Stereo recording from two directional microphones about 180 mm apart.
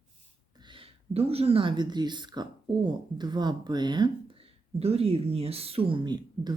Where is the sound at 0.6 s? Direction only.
30° right (ahead or behind).